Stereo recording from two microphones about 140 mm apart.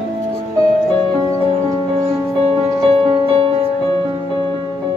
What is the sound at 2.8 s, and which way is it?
Music, 40° right (ahead or behind).